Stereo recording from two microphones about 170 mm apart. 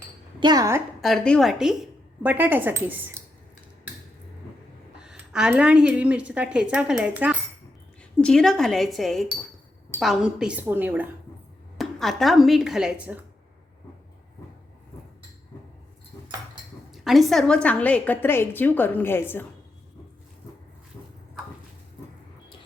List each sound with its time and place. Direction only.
0.3 s a woman's voice: 25° right (ahead or behind)
1.0 s a woman's voice: 5° left (ahead or behind); by 3.2 s 15° right (ahead or behind)
4.9 s speech: 5° right (ahead or behind)
8.2 s speech: 5° left (ahead or behind)
11.8 s speech: centre (ahead or behind)
16.9 s a woman's voice: centre (ahead or behind)